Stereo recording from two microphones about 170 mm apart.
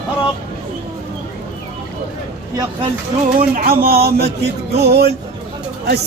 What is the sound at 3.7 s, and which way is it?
A man's voice, 60° right (ahead or behind).